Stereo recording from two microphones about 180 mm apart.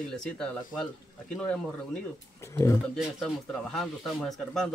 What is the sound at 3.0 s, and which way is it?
Speech, centre (ahead or behind).